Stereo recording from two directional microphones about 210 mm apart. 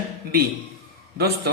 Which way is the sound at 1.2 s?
50° right (ahead or behind).